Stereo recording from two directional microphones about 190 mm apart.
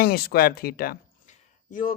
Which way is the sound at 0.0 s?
55° left (ahead or behind).